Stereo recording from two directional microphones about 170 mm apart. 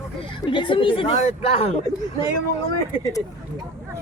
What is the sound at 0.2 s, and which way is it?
Speech, 30° left (ahead or behind).